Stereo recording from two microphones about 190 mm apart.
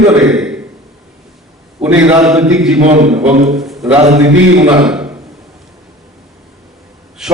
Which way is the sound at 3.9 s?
35° right (ahead or behind).